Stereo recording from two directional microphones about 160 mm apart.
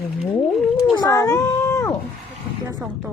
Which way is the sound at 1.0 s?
20° left (ahead or behind).